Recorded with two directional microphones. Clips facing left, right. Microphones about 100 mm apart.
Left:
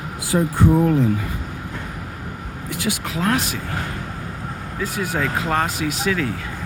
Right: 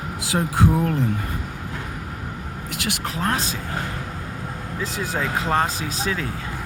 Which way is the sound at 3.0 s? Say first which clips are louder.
Left 2 dB; 35° right (ahead or behind).